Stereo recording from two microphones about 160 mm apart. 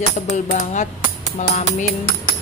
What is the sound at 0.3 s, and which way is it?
Speech, 50° left (ahead or behind).